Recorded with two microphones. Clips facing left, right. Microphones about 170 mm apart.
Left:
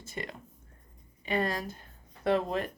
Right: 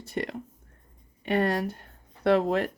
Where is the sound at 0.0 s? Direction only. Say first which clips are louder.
Right 8 dB; 65° right (ahead or behind).